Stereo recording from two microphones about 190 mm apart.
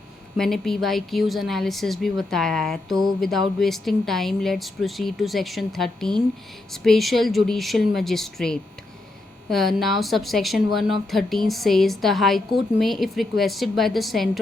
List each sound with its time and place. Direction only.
0.3 s speech: centre (ahead or behind)
2.9 s mantra: 20° right (ahead or behind)
3.2 s speech: centre (ahead or behind)